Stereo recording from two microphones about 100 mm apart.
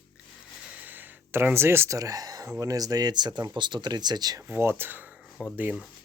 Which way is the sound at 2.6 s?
35° right (ahead or behind).